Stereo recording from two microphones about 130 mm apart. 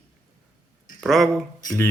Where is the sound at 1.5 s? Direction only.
30° left (ahead or behind).